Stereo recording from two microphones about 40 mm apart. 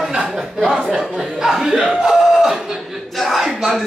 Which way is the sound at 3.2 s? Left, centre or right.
Centre.